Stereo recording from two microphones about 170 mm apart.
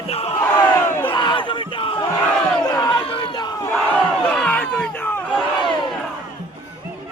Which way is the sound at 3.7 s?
5° left (ahead or behind).